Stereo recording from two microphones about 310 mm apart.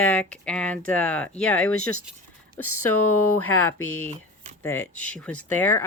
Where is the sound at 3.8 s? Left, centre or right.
Left.